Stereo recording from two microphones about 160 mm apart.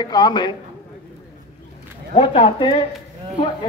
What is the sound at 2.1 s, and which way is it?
Speech, 30° left (ahead or behind).